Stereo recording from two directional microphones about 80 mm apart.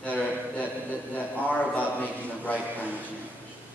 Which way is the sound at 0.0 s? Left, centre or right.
Left.